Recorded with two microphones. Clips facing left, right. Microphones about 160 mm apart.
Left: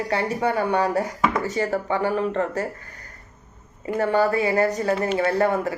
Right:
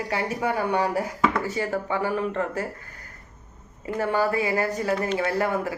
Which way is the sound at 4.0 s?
10° right (ahead or behind).